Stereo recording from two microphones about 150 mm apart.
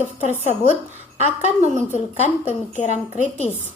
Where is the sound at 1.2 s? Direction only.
50° left (ahead or behind).